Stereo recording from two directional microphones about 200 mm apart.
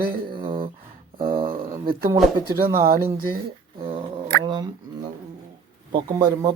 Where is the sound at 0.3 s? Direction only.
25° right (ahead or behind).